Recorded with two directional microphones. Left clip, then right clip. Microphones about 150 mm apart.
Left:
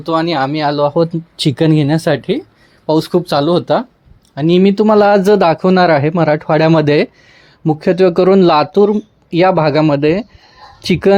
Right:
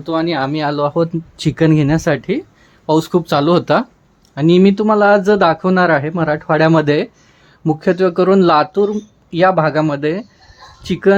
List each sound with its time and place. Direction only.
0.0 s speech: 10° left (ahead or behind)
4.9 s speech: 30° left (ahead or behind)